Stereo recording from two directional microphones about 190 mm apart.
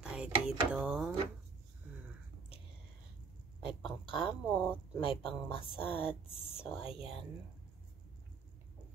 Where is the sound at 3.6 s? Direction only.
5° right (ahead or behind).